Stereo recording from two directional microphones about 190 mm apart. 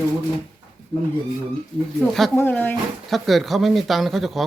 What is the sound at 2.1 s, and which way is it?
Speech, centre (ahead or behind).